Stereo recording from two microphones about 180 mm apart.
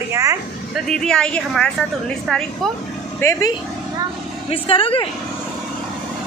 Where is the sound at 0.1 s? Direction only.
15° right (ahead or behind).